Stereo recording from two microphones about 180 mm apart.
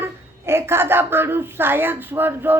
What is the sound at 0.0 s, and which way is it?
A woman's voice, 15° right (ahead or behind).